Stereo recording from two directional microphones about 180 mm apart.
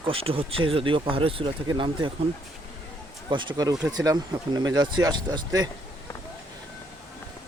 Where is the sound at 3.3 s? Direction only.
25° right (ahead or behind).